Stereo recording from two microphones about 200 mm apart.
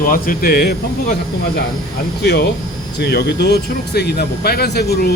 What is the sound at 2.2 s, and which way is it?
Speech, 55° left (ahead or behind).